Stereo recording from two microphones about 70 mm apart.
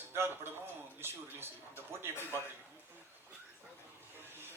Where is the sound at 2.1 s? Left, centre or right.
Left.